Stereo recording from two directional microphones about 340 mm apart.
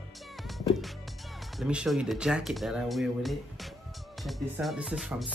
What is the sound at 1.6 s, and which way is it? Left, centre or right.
Speech, centre.